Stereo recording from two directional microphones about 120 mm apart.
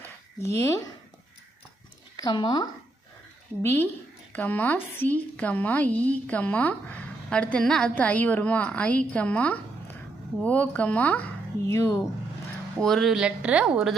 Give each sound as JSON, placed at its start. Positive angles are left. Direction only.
{"t": 0.0, "sound": "a sound", "side_deg": 20}
{"t": 2.1, "sound": "speech", "side_deg": 35}
{"t": 3.6, "sound": "a woman's voice", "side_deg": 20}
{"t": 11.7, "sound": "speech", "side_deg": 20}
{"t": 12.8, "sound": "speech", "side_deg": 0}